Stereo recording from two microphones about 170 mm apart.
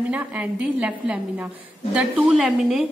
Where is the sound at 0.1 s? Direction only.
10° right (ahead or behind).